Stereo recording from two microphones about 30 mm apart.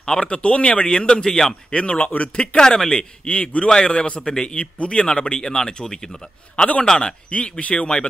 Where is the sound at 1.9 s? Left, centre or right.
Left.